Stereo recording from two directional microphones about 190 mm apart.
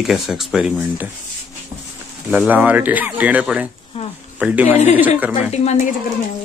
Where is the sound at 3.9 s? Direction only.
30° left (ahead or behind).